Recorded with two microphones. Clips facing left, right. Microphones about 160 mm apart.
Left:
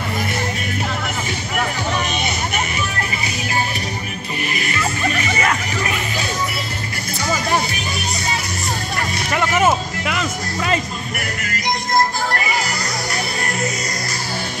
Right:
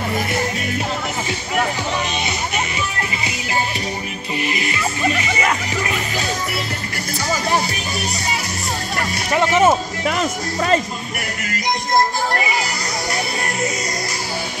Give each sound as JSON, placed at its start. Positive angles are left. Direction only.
{"t": 4.4, "sound": "music", "side_deg": -25}
{"t": 9.4, "sound": "speech", "side_deg": -30}